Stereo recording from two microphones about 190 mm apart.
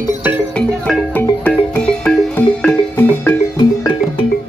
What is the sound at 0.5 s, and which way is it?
Music, 5° left (ahead or behind).